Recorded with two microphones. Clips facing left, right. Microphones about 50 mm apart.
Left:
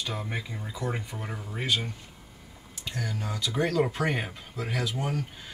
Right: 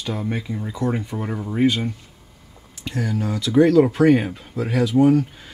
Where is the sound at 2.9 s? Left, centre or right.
Centre.